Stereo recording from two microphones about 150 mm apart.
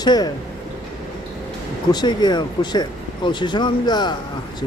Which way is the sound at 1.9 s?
30° left (ahead or behind).